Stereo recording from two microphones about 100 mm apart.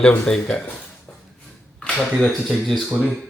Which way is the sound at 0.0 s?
10° left (ahead or behind).